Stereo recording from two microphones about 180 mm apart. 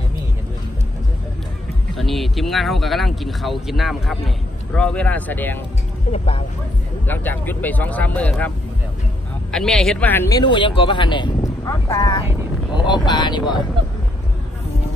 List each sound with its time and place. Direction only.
2.0 s speech: centre (ahead or behind)
6.1 s speech: 30° left (ahead or behind)
7.1 s speech: 10° left (ahead or behind)
9.5 s speech: 5° left (ahead or behind); by 13.6 s 25° left (ahead or behind)